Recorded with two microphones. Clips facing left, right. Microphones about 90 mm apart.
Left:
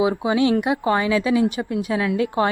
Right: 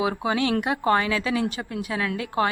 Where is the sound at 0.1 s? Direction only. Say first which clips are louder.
Left 5 dB; 15° left (ahead or behind).